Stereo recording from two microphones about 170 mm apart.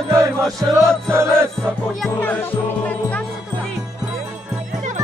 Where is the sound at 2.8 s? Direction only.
10° left (ahead or behind).